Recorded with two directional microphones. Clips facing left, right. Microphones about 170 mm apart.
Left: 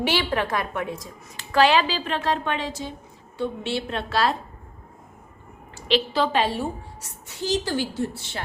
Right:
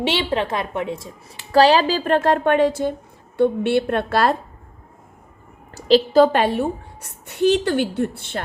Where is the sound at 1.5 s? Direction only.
35° right (ahead or behind).